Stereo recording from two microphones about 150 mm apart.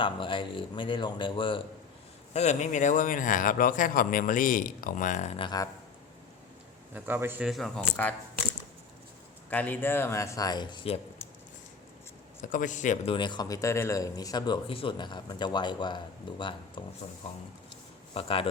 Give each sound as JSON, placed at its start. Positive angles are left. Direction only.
{"t": 0.0, "sound": "speech", "side_deg": 35}
{"t": 2.3, "sound": "speech", "side_deg": 50}
{"t": 5.4, "sound": "speech", "side_deg": 30}
{"t": 6.9, "sound": "a man's voice", "side_deg": -15}
{"t": 7.4, "sound": "speech", "side_deg": 0}
{"t": 9.5, "sound": "speech", "side_deg": 10}
{"t": 12.5, "sound": "speech", "side_deg": 60}
{"t": 13.1, "sound": "speech", "side_deg": 30}
{"t": 18.1, "sound": "speech", "side_deg": 40}